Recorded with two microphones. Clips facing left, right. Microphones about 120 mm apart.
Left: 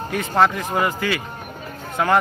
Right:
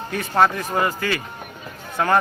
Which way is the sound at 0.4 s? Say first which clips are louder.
Even; 20° left (ahead or behind).